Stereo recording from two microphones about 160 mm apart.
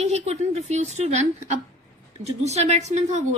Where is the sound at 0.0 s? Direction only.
40° right (ahead or behind).